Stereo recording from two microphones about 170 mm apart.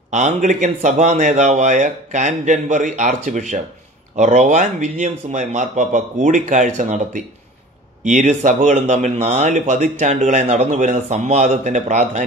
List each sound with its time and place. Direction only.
0.1 s speech: 45° right (ahead or behind)